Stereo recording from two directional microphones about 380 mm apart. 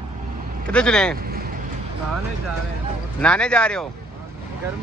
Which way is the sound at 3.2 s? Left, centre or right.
Centre.